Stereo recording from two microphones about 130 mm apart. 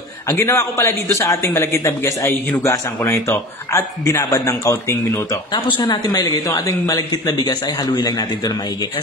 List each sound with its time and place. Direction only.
0.3 s a man's voice: 20° left (ahead or behind)
5.5 s a man's voice: 35° left (ahead or behind)